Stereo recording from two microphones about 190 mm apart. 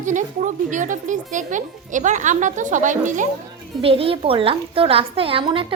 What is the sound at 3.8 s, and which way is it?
A woman's voice, 30° right (ahead or behind).